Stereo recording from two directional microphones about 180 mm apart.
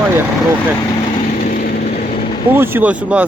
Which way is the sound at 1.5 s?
55° left (ahead or behind).